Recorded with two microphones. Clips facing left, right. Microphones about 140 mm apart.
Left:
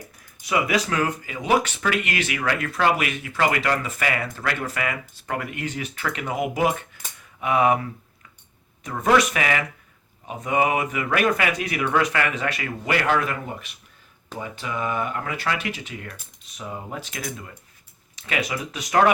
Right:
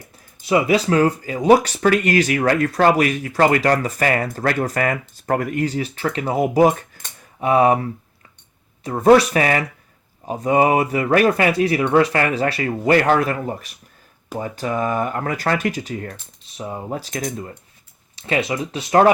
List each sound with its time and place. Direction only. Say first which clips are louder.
0.4 s speech: right 6 dB; 30° right (ahead or behind)
18.2 s speech: right 6 dB; 30° right (ahead or behind)